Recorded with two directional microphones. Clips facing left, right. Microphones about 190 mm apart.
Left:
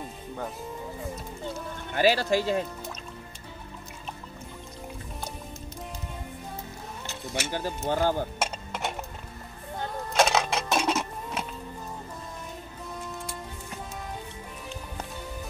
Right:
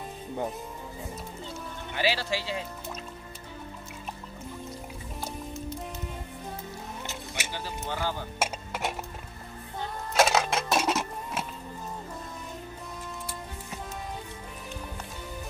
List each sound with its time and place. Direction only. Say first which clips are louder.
2.0 s speech: left 6 dB; 45° left (ahead or behind)
7.5 s speech: left 7 dB; 50° left (ahead or behind)
8.4 s music: even; 5° right (ahead or behind)
10.1 s music: even; 5° right (ahead or behind)